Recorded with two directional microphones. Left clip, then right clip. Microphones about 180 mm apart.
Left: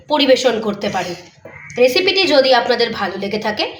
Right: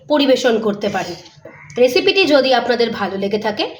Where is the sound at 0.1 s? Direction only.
50° right (ahead or behind).